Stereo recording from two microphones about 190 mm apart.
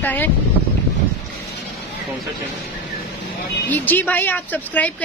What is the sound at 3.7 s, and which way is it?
Speech, 10° left (ahead or behind).